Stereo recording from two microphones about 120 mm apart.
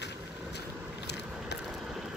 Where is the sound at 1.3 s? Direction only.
5° right (ahead or behind).